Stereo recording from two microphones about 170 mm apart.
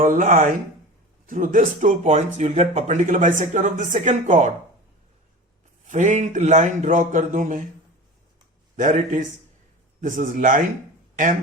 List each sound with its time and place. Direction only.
0.0 s speech: 50° right (ahead or behind)
5.9 s speech: 45° right (ahead or behind)
8.7 s speech: 45° right (ahead or behind)